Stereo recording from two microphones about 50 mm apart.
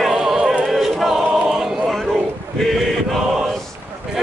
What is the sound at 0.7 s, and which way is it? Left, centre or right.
Choir, centre.